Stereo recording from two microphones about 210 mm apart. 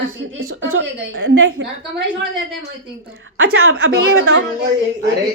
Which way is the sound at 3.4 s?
70° right (ahead or behind).